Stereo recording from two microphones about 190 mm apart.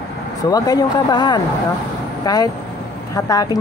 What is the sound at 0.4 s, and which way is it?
A woman's voice, 20° left (ahead or behind).